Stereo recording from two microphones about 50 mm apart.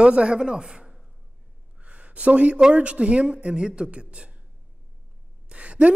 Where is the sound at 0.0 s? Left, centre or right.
Right.